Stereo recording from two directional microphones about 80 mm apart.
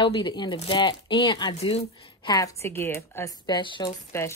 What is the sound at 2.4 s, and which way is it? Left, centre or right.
Speech, left.